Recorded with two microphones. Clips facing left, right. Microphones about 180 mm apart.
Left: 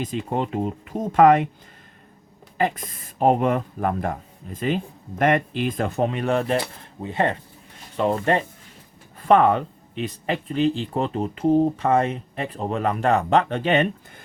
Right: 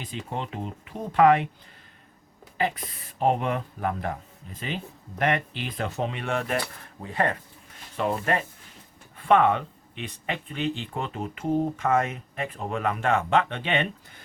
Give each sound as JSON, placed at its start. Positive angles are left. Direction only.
{"t": 0.0, "sound": "speech", "side_deg": 45}
{"t": 2.6, "sound": "speech", "side_deg": 45}
{"t": 7.0, "sound": "speech", "side_deg": 25}